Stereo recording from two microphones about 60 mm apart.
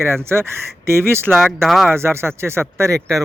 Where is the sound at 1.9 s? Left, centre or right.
Right.